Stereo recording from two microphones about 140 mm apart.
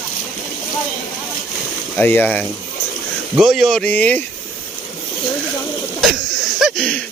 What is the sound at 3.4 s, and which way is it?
Speech, centre (ahead or behind).